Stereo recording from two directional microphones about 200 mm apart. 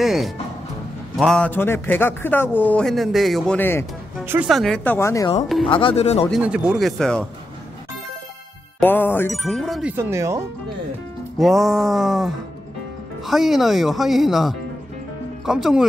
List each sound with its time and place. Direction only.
0.0 s speech: centre (ahead or behind)
4.3 s speech: 5° right (ahead or behind); by 5.3 s 15° left (ahead or behind)
5.7 s speech: 25° left (ahead or behind)
6.4 s speech: 5° right (ahead or behind)
8.7 s speech: 10° left (ahead or behind); by 10.4 s 15° right (ahead or behind)
11.3 s speech: centre (ahead or behind)